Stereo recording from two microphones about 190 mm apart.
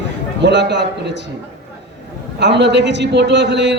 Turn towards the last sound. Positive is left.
turn(degrees=-65)  # may be behind; listen again after turning